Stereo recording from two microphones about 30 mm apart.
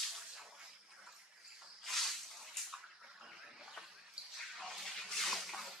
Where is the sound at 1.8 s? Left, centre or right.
Centre.